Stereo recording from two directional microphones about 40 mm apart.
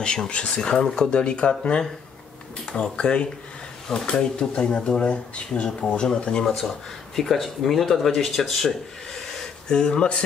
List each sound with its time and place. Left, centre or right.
0.3 s speech: left
7.2 s speech: centre
9.7 s speech: centre